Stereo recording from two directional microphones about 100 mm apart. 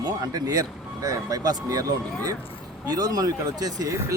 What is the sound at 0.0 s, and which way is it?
Speech, 40° right (ahead or behind).